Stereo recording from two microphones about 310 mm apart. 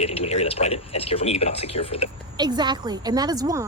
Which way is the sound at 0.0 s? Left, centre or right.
Centre.